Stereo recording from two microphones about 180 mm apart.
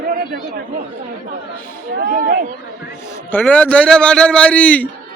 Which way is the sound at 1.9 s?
50° right (ahead or behind).